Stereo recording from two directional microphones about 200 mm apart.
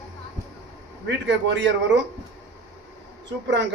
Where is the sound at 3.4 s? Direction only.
60° right (ahead or behind).